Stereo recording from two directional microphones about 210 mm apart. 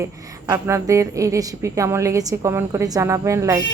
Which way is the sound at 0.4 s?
15° right (ahead or behind).